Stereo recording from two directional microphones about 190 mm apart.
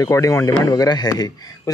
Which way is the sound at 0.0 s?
15° left (ahead or behind).